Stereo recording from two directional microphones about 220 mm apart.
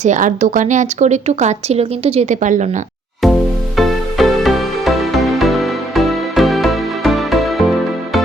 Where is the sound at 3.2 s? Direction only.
Centre (ahead or behind).